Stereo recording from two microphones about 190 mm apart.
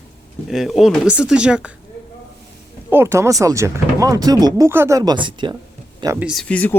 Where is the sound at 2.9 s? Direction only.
15° right (ahead or behind).